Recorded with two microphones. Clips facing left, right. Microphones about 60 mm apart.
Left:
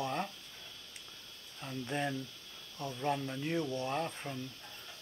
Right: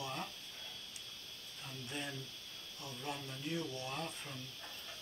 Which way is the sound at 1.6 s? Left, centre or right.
Left.